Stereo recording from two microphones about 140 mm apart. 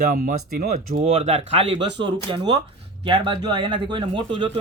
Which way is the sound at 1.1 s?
45° right (ahead or behind).